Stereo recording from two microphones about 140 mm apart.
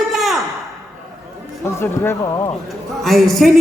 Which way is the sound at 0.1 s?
Centre (ahead or behind).